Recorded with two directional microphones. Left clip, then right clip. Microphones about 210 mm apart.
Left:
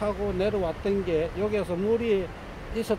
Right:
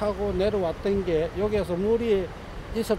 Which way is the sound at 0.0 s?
15° right (ahead or behind).